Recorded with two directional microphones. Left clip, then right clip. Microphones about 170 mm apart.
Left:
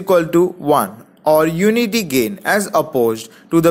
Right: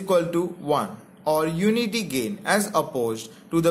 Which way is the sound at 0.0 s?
40° left (ahead or behind).